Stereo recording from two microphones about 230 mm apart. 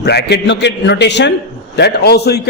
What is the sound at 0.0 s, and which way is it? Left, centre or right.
A man's voice, left.